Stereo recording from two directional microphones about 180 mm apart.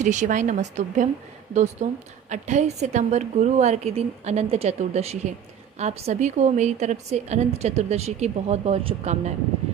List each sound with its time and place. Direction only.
0.0 s a woman's voice: 40° right (ahead or behind)